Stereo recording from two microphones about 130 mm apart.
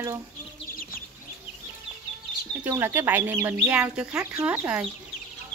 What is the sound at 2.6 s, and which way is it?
Speech, 20° right (ahead or behind).